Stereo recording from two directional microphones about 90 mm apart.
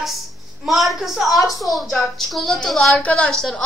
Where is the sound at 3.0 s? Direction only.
15° left (ahead or behind).